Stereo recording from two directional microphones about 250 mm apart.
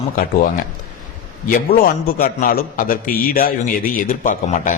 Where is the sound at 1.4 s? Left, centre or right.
Left.